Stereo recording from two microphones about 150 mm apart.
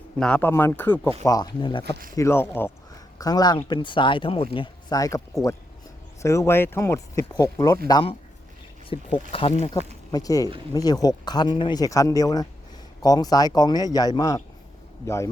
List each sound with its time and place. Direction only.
0.2 s speech: 10° left (ahead or behind)
1.2 s speech: 25° left (ahead or behind)
1.8 s speech: 80° right
2.1 s speech: 15° left (ahead or behind)
3.2 s speech: 25° left (ahead or behind)
6.2 s speech: 20° left (ahead or behind)
8.9 s speech: 40° left (ahead or behind)
10.1 s speech: 25° left (ahead or behind)